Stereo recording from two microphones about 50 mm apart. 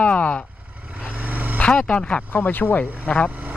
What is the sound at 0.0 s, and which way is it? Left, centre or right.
Vehicle, left.